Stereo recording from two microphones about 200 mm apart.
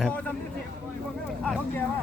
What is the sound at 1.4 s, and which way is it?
Speech, 5° left (ahead or behind).